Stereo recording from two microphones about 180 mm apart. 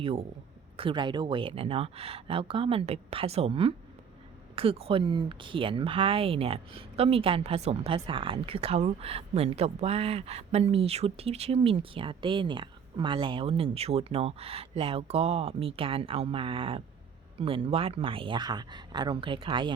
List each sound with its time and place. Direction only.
0.0 s speech: 30° right (ahead or behind)